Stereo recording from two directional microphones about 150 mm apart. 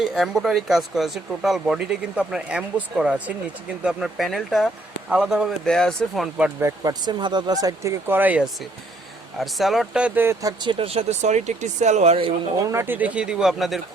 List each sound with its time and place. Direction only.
0.0 s speech: centre (ahead or behind)
6.6 s speech: 20° right (ahead or behind)
9.4 s speech: centre (ahead or behind)
10.6 s speech: 35° right (ahead or behind)
12.6 s speech: 15° right (ahead or behind); by 13.8 s centre (ahead or behind)